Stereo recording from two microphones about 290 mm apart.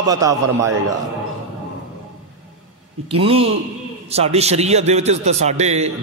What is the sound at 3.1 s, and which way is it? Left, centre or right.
A man's voice, centre.